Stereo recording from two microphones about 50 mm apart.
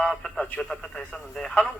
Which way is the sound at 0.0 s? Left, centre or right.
Left.